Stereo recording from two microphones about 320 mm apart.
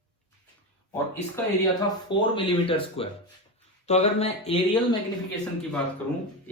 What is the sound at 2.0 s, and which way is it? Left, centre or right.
Speech, centre.